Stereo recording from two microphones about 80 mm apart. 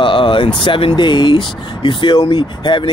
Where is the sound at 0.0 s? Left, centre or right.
Left.